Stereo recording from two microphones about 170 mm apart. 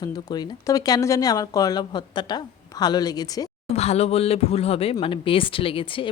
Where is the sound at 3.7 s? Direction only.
40° left (ahead or behind).